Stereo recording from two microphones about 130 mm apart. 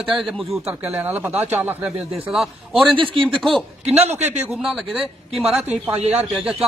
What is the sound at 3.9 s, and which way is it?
Speech, 60° right (ahead or behind).